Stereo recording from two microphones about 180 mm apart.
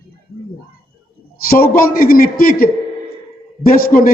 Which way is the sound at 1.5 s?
55° left (ahead or behind).